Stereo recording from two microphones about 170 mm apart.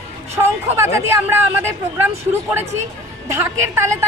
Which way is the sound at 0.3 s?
15° right (ahead or behind).